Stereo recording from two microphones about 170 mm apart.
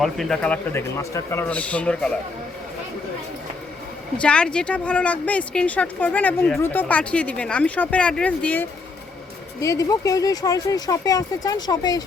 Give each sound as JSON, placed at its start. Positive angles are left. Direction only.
{"t": 0.0, "sound": "speech", "side_deg": 5}
{"t": 4.2, "sound": "speech", "side_deg": 5}
{"t": 9.6, "sound": "speech", "side_deg": 20}